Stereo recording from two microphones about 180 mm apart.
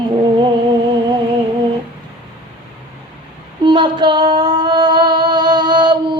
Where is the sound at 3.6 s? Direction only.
25° right (ahead or behind).